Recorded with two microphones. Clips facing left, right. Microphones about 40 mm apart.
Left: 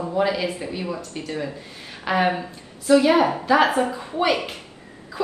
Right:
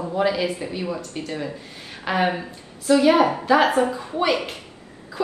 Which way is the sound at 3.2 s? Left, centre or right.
Centre.